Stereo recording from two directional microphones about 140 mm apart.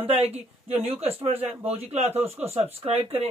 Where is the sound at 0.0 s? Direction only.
45° right (ahead or behind).